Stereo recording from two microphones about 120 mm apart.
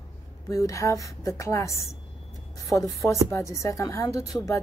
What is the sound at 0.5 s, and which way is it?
A woman's voice, 25° left (ahead or behind).